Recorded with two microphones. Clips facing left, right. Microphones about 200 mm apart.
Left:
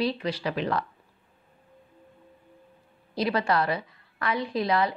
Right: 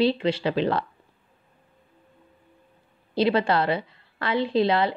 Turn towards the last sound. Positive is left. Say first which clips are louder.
# right 4 dB
turn(degrees=-30)  # may be behind; listen again after turning